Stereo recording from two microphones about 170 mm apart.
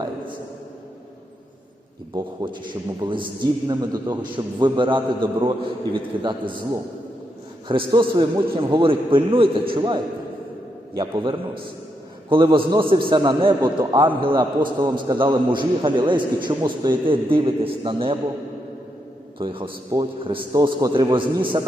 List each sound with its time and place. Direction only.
2.1 s a man's voice: 25° right (ahead or behind)
7.7 s a man's voice: 25° right (ahead or behind)
19.4 s a man's voice: 30° right (ahead or behind)